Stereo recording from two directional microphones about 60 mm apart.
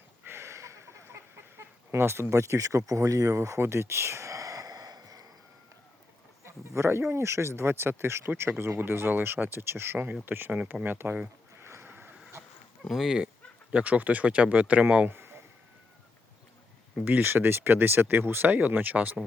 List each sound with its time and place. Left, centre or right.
0.3 s chicken: right
3.6 s a sound: right
6.4 s a sound: right
7.1 s speech: right
11.6 s boat: right
11.9 s vehicle: right
12.9 s speech: centre
13.2 s speech: right
15.0 s a sound: right
17.1 s speech: right